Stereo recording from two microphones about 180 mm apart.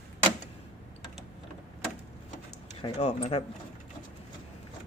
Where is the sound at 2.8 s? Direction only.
35° left (ahead or behind).